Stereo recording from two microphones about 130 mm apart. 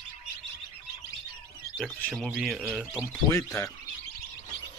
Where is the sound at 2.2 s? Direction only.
Centre (ahead or behind).